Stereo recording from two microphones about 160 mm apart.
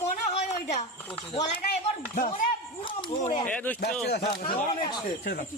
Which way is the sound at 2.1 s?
60° left (ahead or behind).